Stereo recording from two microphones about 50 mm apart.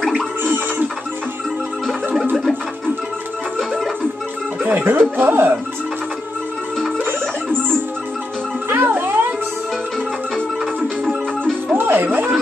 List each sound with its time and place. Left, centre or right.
0.4 s a sound: right
4.6 s speech: right
8.6 s music: right
10.6 s music: centre
11.7 s music: right